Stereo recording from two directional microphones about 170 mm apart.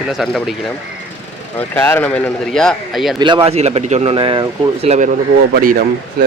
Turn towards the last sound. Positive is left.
turn(degrees=-55)  # may be behind; listen again after turning